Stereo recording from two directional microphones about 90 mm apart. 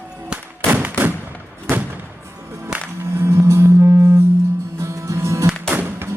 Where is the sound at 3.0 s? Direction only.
30° right (ahead or behind).